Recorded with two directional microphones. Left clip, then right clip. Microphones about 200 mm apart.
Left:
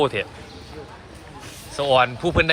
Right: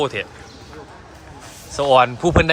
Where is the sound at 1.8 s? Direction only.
20° right (ahead or behind).